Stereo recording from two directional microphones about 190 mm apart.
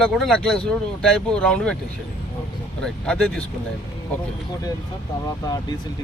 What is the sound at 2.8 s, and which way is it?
Speech, 5° left (ahead or behind).